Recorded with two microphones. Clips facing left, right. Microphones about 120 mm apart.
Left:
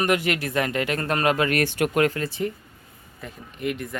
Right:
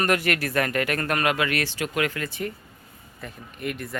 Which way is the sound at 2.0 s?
35° left (ahead or behind).